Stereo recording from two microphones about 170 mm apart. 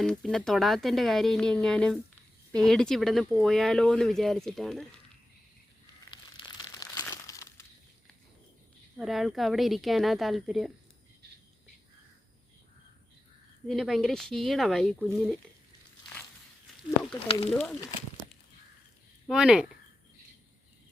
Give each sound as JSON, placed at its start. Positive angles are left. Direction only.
{"t": 0.0, "sound": "speech", "side_deg": 0}
{"t": 6.1, "sound": "crumpling", "side_deg": 25}
{"t": 9.0, "sound": "speech", "side_deg": 0}
{"t": 13.7, "sound": "speech", "side_deg": 0}
{"t": 17.5, "sound": "speech", "side_deg": 5}
{"t": 19.3, "sound": "speech", "side_deg": -5}